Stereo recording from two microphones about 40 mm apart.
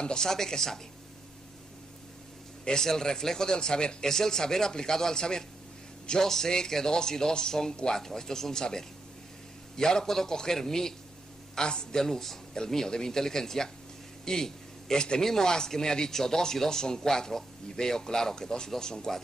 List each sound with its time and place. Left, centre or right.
0.0 s speech: centre
2.6 s speech: centre